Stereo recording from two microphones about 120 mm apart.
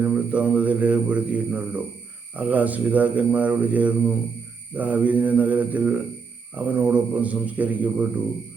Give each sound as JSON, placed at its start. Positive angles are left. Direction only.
{"t": 0.0, "sound": "speech", "side_deg": -10}